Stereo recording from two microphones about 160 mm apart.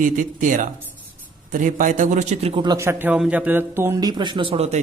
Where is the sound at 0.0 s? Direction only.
55° right (ahead or behind).